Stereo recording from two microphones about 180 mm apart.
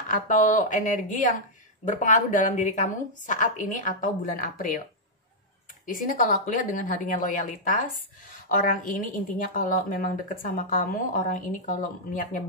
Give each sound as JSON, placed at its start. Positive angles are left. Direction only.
{"t": 0.1, "sound": "a woman's voice", "side_deg": 50}
{"t": 5.9, "sound": "a woman's voice", "side_deg": 50}